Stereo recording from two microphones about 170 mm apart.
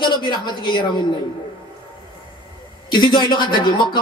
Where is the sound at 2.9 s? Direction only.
25° left (ahead or behind).